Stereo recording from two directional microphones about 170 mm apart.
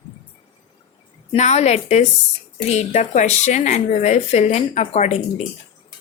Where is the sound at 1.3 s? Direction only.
40° left (ahead or behind).